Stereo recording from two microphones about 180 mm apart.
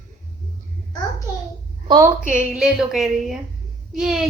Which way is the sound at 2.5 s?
5° right (ahead or behind).